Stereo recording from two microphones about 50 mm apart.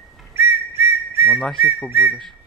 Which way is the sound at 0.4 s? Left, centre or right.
Right.